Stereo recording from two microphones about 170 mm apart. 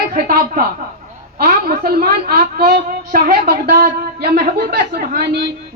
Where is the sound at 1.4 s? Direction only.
60° right (ahead or behind).